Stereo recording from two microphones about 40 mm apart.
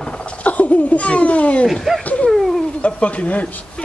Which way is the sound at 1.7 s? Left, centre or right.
Centre.